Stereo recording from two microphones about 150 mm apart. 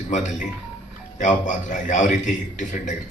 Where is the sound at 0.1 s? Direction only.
55° left (ahead or behind).